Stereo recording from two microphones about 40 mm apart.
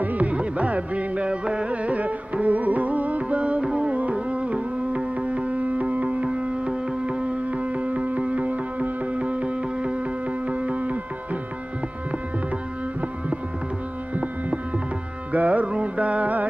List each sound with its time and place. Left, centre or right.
0.0 s music: right
14.1 s music: right
15.7 s carnatic music: right